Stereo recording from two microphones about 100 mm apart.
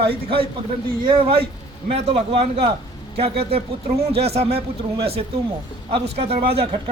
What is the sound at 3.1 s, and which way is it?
Speech, 85° right.